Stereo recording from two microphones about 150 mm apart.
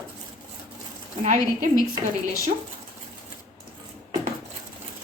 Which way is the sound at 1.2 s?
60° right (ahead or behind).